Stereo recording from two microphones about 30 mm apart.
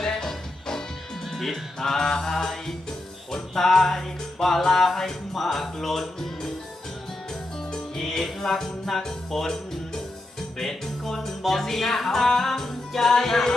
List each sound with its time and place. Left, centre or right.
0.0 s music: centre
7.7 s music: centre